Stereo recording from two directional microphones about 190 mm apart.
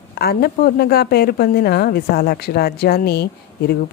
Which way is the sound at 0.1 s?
55° left (ahead or behind).